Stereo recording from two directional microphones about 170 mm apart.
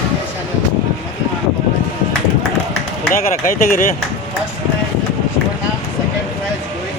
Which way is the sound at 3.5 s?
55° left (ahead or behind).